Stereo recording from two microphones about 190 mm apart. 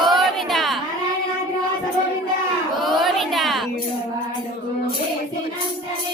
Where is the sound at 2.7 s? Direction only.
Centre (ahead or behind).